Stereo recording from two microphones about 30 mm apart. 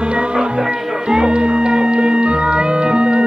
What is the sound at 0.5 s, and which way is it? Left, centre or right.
Music, right.